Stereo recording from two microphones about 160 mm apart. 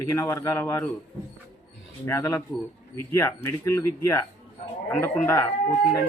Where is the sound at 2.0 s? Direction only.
15° left (ahead or behind).